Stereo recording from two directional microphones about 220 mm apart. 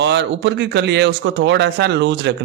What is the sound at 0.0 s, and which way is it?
Speech, 55° right (ahead or behind).